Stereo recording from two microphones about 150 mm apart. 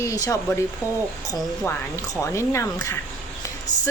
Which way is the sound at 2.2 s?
20° left (ahead or behind).